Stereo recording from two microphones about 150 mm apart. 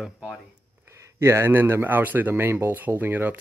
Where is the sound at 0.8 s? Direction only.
20° right (ahead or behind).